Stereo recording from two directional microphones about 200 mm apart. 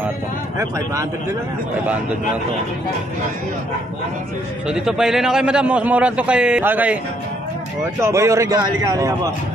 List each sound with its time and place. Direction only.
0.6 s a man's voice: 15° right (ahead or behind)
4.6 s a man's voice: 5° right (ahead or behind)
8.0 s a man's voice: 15° right (ahead or behind)